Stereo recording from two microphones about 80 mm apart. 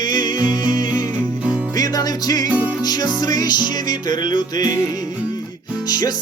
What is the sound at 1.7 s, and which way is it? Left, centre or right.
Music, left.